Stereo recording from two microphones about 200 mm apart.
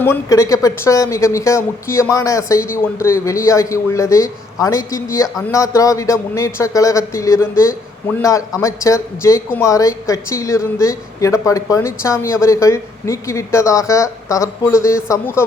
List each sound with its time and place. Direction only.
0.0 s a man's voice: 15° left (ahead or behind)